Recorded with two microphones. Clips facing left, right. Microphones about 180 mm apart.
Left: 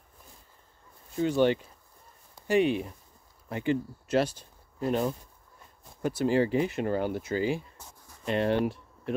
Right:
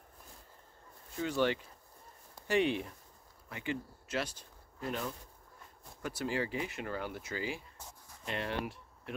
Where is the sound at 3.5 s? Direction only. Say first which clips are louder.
Left 10 dB; 35° left (ahead or behind).